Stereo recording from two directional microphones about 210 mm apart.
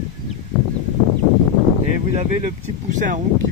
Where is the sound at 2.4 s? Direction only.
35° right (ahead or behind).